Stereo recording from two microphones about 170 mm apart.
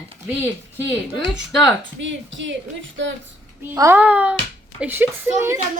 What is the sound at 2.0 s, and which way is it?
A woman's voice, 90° right.